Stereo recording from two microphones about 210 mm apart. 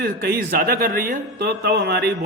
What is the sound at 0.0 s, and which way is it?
A man's voice, 50° right (ahead or behind).